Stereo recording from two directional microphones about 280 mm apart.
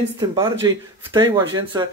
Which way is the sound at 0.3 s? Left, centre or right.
Centre.